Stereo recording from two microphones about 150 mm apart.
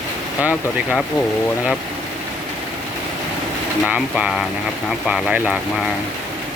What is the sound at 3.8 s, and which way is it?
Speech, 5° right (ahead or behind).